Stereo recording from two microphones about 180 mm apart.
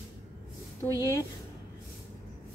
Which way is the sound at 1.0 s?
15° left (ahead or behind).